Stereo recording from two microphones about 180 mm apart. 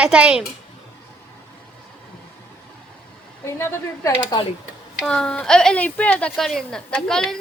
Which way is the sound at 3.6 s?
15° left (ahead or behind).